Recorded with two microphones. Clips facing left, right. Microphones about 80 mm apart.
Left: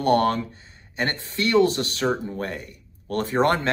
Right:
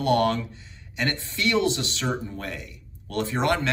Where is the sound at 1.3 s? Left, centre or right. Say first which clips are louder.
Left 5 dB; left.